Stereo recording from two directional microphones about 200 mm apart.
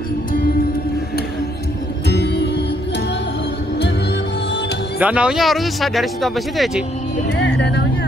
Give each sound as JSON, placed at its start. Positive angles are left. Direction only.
{"t": 2.0, "sound": "music", "side_deg": 55}
{"t": 5.0, "sound": "speech", "side_deg": -5}
{"t": 7.2, "sound": "music", "side_deg": 60}